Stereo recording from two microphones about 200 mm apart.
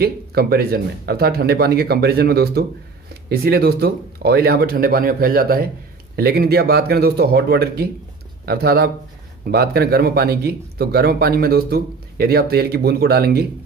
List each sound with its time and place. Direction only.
0.0 s speech: 50° right (ahead or behind)